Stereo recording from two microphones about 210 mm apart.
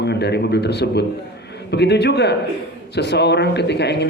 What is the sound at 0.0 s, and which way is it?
A man's voice, 50° left (ahead or behind).